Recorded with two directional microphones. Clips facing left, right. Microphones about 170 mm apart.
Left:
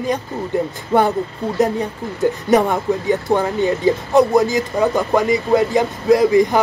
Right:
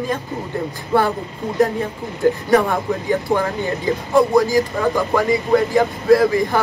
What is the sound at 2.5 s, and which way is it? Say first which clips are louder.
Speech: left 3 dB; 20° left (ahead or behind).